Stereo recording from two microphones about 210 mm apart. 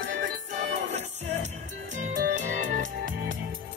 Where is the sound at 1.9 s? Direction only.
35° right (ahead or behind).